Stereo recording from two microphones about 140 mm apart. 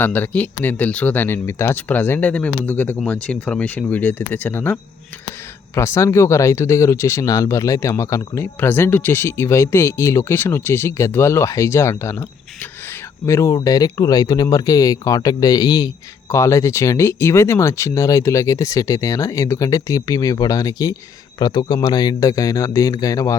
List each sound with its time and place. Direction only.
0.0 s speech: 15° left (ahead or behind)
13.2 s speech: 20° left (ahead or behind)